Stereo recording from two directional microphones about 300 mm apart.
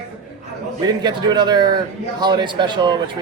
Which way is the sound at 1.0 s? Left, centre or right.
Centre.